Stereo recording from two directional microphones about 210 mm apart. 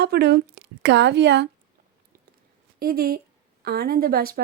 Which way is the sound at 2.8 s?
45° right (ahead or behind).